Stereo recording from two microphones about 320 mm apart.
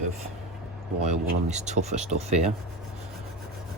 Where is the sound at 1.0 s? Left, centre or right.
Right.